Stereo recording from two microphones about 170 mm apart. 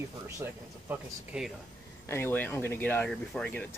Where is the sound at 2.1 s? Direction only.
15° left (ahead or behind).